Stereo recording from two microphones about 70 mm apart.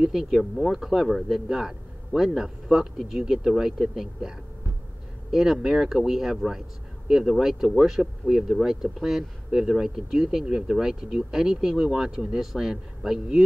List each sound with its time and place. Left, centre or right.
0.0 s speech: centre